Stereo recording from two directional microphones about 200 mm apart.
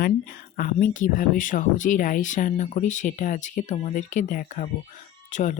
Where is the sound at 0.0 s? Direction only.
45° left (ahead or behind).